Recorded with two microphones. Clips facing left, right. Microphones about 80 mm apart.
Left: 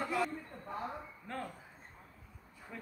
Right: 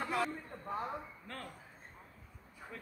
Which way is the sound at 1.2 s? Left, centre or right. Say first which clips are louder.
Left 5 dB; left.